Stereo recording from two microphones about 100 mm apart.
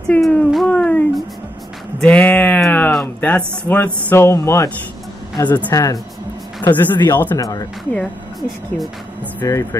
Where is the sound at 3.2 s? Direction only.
15° left (ahead or behind).